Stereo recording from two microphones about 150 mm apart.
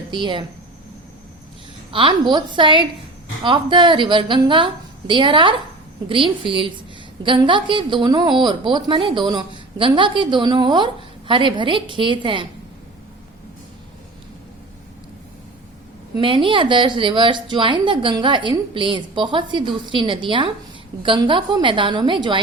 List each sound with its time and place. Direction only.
0.2 s a woman's voice: 35° right (ahead or behind)
1.9 s a woman's voice: 35° right (ahead or behind)
16.2 s a woman's voice: 35° right (ahead or behind)